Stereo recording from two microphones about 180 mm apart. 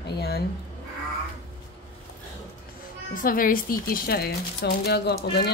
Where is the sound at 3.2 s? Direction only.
50° left (ahead or behind).